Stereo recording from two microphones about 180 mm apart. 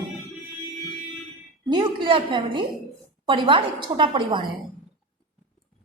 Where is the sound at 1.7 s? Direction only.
25° right (ahead or behind).